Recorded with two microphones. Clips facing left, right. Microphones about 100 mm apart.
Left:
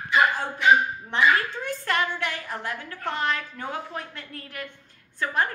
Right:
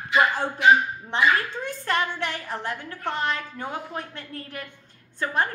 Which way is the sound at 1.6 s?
25° right (ahead or behind).